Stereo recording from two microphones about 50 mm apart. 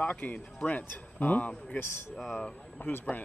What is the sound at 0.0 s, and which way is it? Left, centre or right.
A man's voice, left.